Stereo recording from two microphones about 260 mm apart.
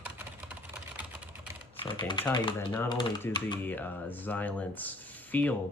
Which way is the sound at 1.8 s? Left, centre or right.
Centre.